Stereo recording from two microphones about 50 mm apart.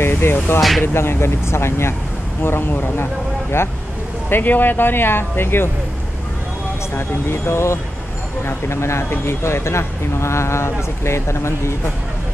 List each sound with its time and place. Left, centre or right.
0.0 s vehicle: left
0.6 s speech: centre
0.9 s speech: left
2.4 s speech: left
4.3 s speech: left
7.0 s speech: left